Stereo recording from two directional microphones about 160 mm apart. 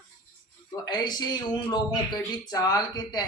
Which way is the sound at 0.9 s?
25° left (ahead or behind).